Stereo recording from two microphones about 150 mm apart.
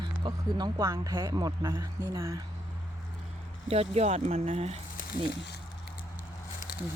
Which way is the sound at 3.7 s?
45° right (ahead or behind).